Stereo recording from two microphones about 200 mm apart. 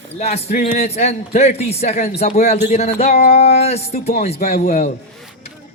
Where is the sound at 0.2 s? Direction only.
30° left (ahead or behind).